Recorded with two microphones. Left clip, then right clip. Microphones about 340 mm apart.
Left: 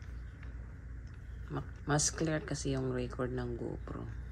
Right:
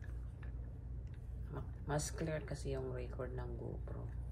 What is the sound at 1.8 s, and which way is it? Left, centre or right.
Speech, left.